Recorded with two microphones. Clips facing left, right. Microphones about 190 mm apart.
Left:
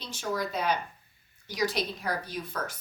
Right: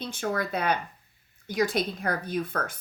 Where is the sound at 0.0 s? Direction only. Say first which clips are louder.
Right 3 dB; 55° right (ahead or behind).